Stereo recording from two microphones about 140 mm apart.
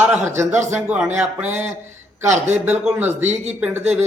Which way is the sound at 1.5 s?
55° right (ahead or behind).